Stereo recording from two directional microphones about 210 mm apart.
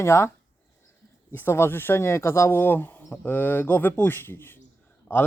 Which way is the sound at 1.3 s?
10° left (ahead or behind).